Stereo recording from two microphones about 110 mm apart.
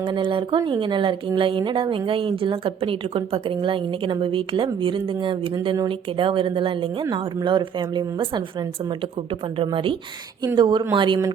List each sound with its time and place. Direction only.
0.0 s a woman's voice: 45° right (ahead or behind)
7.1 s a woman's voice: 45° right (ahead or behind)
9.6 s a woman's voice: 55° right (ahead or behind)
10.6 s a woman's voice: 45° right (ahead or behind)